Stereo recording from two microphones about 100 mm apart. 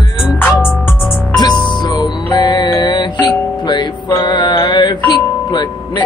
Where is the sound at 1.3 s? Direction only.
45° left (ahead or behind).